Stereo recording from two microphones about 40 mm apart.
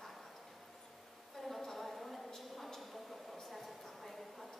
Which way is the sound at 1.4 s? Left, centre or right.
Centre.